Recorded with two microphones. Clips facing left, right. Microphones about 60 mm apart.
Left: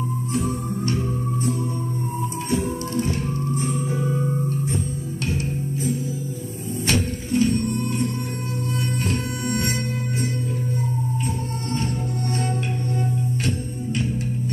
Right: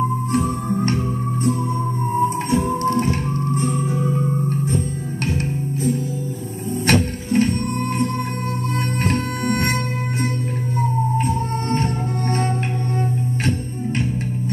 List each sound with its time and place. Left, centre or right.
0.3 s music: right
2.2 s music: right
6.9 s music: right
9.0 s music: right
11.2 s music: right